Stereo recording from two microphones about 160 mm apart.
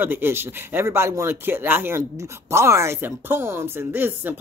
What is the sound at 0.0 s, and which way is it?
Speech, 15° right (ahead or behind).